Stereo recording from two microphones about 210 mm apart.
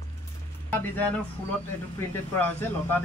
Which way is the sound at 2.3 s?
10° left (ahead or behind).